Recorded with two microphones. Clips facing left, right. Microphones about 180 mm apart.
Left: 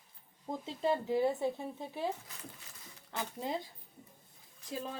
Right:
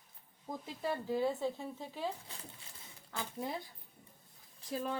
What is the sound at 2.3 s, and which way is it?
Speech, 30° right (ahead or behind).